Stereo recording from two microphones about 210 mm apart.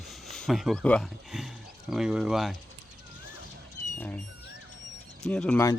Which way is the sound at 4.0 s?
5° left (ahead or behind).